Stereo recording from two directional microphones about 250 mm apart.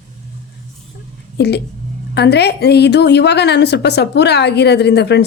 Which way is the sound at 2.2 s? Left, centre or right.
Left.